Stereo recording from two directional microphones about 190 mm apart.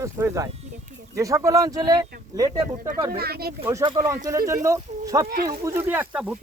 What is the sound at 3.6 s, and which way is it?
Speech, 15° right (ahead or behind).